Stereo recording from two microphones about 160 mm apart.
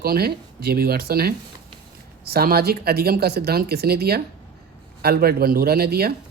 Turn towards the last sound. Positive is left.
turn(degrees=-75)  # may be behind; listen again after turning